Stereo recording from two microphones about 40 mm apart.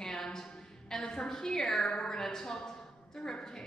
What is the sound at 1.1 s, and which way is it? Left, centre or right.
Speech, centre.